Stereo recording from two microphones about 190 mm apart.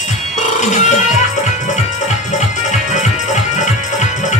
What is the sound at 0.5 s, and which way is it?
Music, 40° left (ahead or behind).